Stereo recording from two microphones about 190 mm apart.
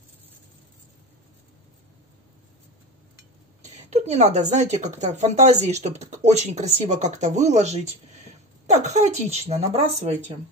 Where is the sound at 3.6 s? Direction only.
35° right (ahead or behind).